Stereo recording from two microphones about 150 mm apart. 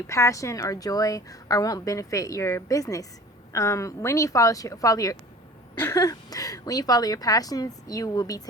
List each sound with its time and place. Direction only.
0.1 s a woman's voice: 20° left (ahead or behind)